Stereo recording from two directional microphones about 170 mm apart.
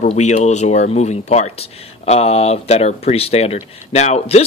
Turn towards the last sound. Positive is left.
turn(degrees=40)  # may be behind; listen again after turning